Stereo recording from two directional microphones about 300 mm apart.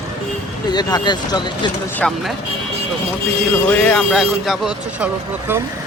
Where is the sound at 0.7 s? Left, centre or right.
Centre.